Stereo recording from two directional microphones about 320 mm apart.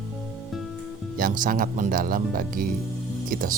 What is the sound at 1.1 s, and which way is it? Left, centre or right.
Speech, right.